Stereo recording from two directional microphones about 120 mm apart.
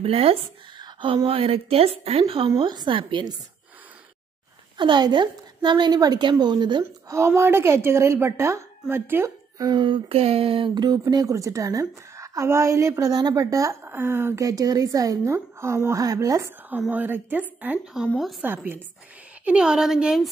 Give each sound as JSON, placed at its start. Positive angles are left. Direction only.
{"t": 0.0, "sound": "a woman's voice", "side_deg": -55}
{"t": 0.7, "sound": "a woman's voice", "side_deg": -40}
{"t": 2.6, "sound": "a woman's voice", "side_deg": -40}
{"t": 4.7, "sound": "a woman's voice", "side_deg": -40}
{"t": 6.8, "sound": "speech", "side_deg": -25}
{"t": 9.6, "sound": "speech", "side_deg": -40}
{"t": 16.9, "sound": "speech", "side_deg": -15}
{"t": 17.9, "sound": "a woman's voice", "side_deg": -5}
{"t": 18.4, "sound": "speech", "side_deg": -15}
{"t": 19.4, "sound": "a woman's voice", "side_deg": -5}